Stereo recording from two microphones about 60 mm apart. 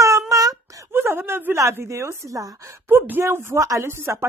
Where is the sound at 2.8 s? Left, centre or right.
Right.